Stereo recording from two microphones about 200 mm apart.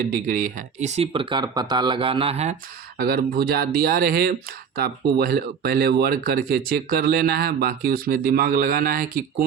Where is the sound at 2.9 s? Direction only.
50° right (ahead or behind).